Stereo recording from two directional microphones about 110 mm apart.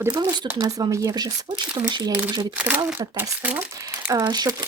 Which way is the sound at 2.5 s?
15° right (ahead or behind).